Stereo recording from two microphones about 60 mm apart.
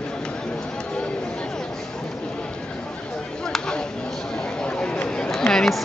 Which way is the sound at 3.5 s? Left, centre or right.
Centre.